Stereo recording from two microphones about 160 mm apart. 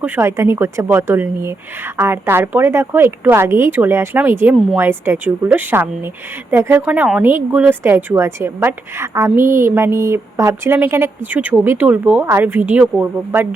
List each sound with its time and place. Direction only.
0.0 s a woman's voice: 15° right (ahead or behind)